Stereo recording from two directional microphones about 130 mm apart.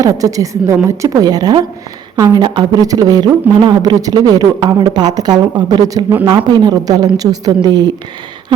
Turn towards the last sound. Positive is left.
turn(degrees=-35)  # may be behind; listen again after turning